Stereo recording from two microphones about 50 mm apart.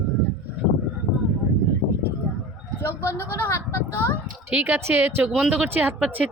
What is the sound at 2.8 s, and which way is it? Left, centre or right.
Speech, left.